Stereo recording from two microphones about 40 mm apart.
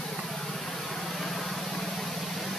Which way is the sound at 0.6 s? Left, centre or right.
Centre.